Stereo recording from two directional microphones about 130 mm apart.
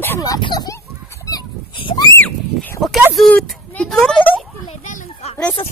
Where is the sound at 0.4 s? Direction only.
35° left (ahead or behind).